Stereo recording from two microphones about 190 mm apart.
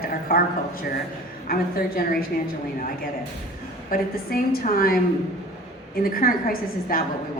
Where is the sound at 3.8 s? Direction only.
50° left (ahead or behind).